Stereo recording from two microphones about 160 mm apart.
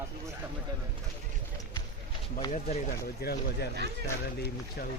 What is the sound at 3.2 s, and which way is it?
Speech, 80° left.